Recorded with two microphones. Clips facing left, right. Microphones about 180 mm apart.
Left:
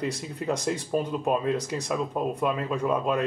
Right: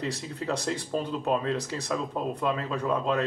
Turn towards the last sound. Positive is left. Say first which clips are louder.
# left 1 dB
turn(degrees=10)  # may be behind; listen again after turning